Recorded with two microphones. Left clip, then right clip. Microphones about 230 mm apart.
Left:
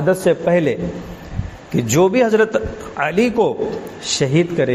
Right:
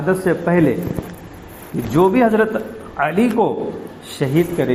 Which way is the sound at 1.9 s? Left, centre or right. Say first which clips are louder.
Even; left.